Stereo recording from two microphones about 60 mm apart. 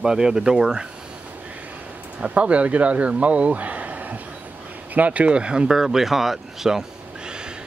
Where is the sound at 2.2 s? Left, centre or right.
Right; by 6.8 s centre.